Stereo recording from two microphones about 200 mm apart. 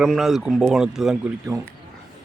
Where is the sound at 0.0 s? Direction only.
Centre (ahead or behind).